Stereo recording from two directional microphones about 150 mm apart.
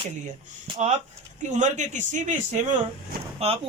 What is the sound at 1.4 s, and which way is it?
A man's voice, 55° right (ahead or behind).